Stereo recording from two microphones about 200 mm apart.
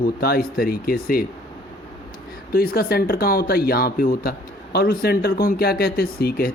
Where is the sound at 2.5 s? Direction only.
50° left (ahead or behind).